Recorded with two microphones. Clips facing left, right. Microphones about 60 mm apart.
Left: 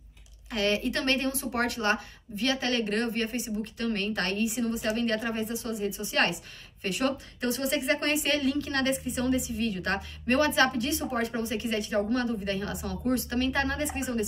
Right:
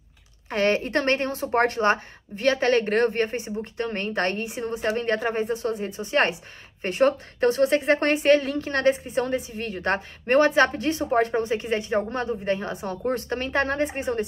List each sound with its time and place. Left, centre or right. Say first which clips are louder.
0.5 s a woman's voice: right 5 dB; right